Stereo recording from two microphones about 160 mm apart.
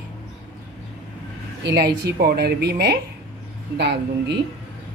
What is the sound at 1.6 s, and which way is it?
Speech, 90° right.